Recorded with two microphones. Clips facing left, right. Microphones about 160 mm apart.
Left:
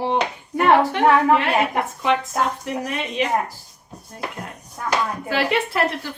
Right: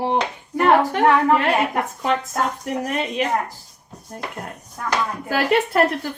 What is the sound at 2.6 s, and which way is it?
Speech, 45° right (ahead or behind).